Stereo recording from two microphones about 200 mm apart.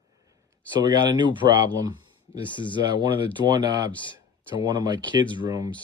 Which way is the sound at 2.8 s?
20° right (ahead or behind).